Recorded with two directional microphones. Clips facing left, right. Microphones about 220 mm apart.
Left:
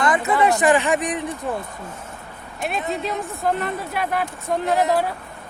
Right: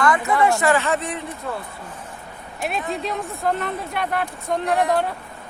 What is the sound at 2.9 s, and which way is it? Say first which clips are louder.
Speech: left 1 dB; centre (ahead or behind).